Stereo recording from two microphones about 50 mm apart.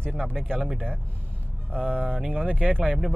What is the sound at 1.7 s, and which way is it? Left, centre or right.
Speech, right.